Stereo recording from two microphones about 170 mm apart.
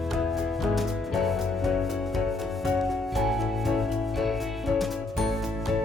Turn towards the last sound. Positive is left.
turn(degrees=0)  # may be behind; listen again after turning